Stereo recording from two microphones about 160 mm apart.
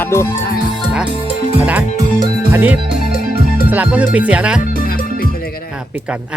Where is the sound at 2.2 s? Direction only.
15° right (ahead or behind).